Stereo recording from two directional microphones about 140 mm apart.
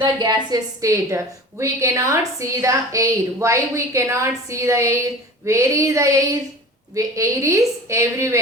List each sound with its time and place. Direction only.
0.0 s a woman's voice: 35° right (ahead or behind)